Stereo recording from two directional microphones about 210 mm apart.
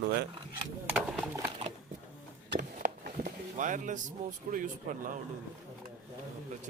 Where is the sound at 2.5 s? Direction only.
50° right (ahead or behind).